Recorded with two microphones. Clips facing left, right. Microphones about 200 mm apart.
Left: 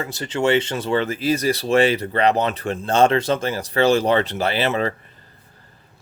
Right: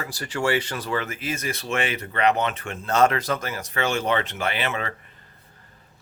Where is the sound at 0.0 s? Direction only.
25° left (ahead or behind).